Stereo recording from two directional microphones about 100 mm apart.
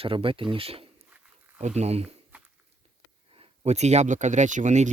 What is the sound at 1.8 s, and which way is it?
Speech, 90° right.